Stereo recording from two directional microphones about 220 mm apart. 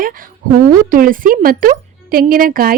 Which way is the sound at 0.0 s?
40° right (ahead or behind).